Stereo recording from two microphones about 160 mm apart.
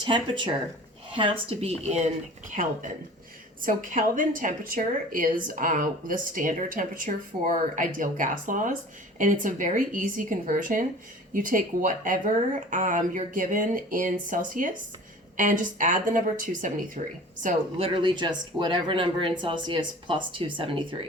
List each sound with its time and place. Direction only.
0.0 s speech: 30° right (ahead or behind)
3.6 s a woman's voice: 55° right (ahead or behind)
17.7 s speech: 35° right (ahead or behind)